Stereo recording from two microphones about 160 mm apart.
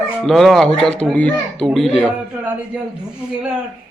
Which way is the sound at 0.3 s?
Centre (ahead or behind).